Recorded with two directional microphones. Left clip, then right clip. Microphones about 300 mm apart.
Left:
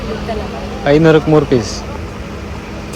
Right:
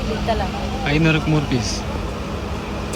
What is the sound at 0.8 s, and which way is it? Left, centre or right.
Speech, centre.